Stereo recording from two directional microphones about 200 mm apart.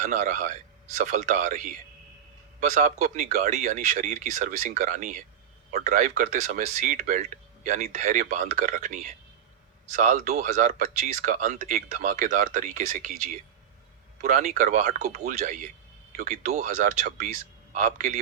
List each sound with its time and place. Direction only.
0.0 s speech: 35° right (ahead or behind)
14.2 s speech: 35° right (ahead or behind)